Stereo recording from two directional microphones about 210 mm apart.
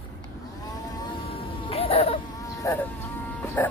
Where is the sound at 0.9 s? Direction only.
25° left (ahead or behind).